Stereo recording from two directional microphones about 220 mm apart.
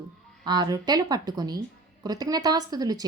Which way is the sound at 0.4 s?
20° right (ahead or behind).